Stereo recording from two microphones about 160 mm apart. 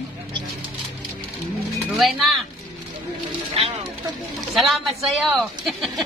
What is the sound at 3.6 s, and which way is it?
Speech, 35° right (ahead or behind).